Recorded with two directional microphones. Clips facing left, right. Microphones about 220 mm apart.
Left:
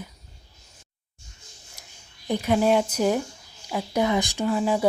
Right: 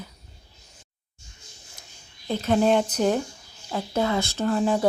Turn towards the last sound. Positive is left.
turn(degrees=10)  # may be behind; listen again after turning